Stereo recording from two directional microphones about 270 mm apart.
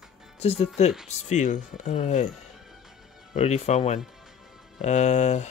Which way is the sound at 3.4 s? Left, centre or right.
Left.